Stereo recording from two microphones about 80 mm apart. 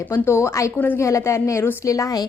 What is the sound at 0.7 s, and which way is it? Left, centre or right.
Speech, left.